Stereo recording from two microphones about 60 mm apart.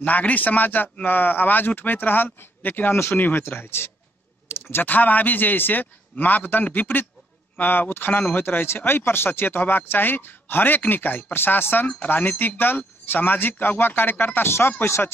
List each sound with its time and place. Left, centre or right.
0.0 s speech: left